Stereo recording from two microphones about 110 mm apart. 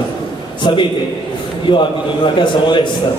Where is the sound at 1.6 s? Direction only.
45° left (ahead or behind).